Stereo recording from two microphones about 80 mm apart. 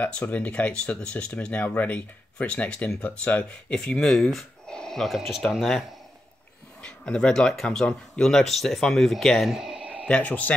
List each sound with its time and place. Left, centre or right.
0.0 s speech: centre
6.8 s speech: centre
10.0 s speech: centre